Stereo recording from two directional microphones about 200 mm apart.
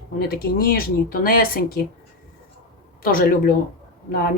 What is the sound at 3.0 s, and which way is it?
Speech, 45° left (ahead or behind).